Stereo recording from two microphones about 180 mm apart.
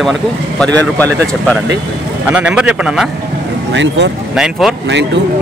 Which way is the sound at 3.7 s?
90° right.